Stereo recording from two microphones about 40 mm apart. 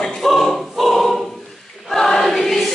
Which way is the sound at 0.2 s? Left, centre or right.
Centre.